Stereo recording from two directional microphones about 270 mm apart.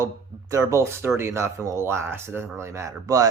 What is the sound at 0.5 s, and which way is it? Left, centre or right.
Speech, centre.